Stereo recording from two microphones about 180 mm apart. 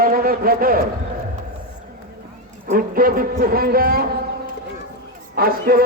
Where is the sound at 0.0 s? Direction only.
55° right (ahead or behind).